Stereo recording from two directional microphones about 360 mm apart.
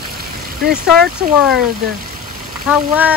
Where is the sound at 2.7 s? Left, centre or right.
Centre.